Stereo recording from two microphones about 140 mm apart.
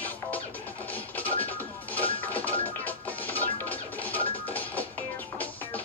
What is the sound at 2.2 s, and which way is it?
Music, 10° left (ahead or behind).